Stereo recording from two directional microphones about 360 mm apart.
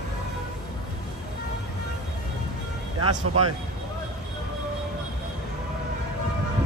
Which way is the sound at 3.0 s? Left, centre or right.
Right.